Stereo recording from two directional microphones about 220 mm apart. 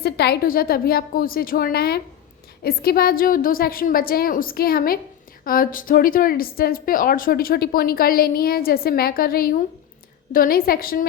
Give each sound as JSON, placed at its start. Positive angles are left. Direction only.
{"t": 0.0, "sound": "a woman's voice", "side_deg": 45}